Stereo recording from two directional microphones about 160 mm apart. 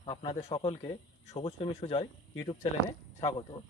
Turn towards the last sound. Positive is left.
turn(degrees=20)  # may be behind; listen again after turning